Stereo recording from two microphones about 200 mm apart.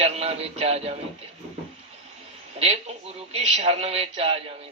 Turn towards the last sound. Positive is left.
turn(degrees=-30)  # may be behind; listen again after turning